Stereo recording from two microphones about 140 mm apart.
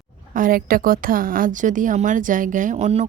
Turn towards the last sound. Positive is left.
turn(degrees=-50)  # may be behind; listen again after turning